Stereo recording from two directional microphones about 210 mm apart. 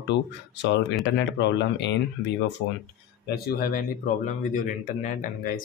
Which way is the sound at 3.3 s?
45° left (ahead or behind).